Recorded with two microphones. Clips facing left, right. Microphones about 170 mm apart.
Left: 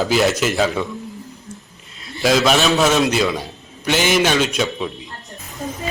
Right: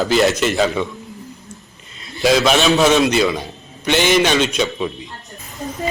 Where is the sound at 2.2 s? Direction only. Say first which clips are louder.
Right 1 dB; centre (ahead or behind).